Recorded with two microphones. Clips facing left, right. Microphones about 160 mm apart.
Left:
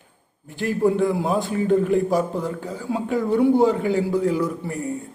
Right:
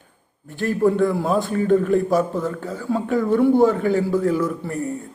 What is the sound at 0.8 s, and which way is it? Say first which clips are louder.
A man's voice: right 1 dB; 15° left (ahead or behind).